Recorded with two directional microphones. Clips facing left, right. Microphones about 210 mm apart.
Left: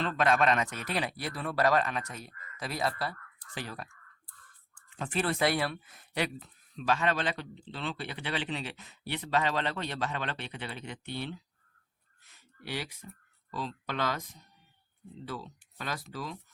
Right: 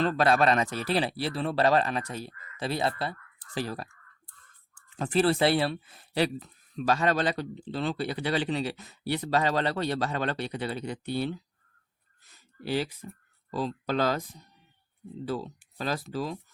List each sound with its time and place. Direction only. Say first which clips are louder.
0.0 s speech: right 4 dB; 35° right (ahead or behind)
12.3 s a sound: right 9 dB; 35° right (ahead or behind)
13.5 s speech: right 7 dB; 35° right (ahead or behind)